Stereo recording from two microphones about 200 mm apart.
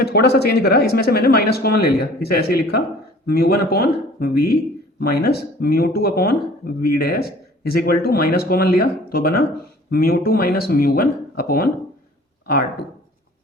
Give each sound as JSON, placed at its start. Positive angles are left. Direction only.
{"t": 0.0, "sound": "speech", "side_deg": 55}